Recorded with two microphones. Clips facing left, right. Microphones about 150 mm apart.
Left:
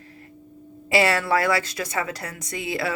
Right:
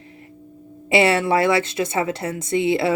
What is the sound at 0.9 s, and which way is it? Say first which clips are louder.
A woman's voice: right 4 dB; 25° right (ahead or behind).